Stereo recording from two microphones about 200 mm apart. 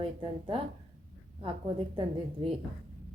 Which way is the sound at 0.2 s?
25° right (ahead or behind).